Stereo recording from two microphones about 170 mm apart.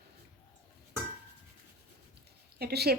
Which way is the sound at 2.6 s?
70° right (ahead or behind).